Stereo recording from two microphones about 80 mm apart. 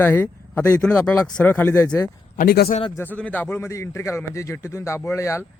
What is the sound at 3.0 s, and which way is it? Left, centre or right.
A man's voice, left.